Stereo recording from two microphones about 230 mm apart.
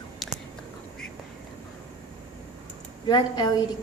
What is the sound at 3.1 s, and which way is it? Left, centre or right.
Speech, centre.